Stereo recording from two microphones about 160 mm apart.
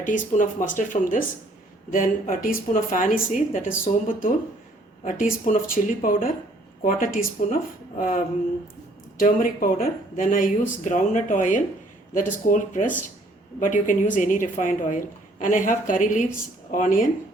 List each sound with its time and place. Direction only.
0.0 s speech: 55° left (ahead or behind)